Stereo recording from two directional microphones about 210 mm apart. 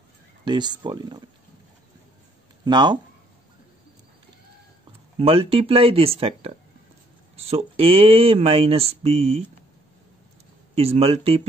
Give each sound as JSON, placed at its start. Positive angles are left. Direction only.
{"t": 0.5, "sound": "speech", "side_deg": -20}
{"t": 2.6, "sound": "speech", "side_deg": -20}
{"t": 5.1, "sound": "speech", "side_deg": -25}
{"t": 10.7, "sound": "speech", "side_deg": -30}